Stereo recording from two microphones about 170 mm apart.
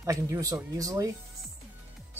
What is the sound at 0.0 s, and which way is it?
A man's voice, 20° right (ahead or behind).